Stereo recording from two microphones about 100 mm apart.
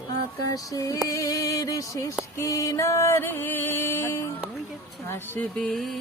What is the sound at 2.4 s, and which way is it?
Music, 30° left (ahead or behind).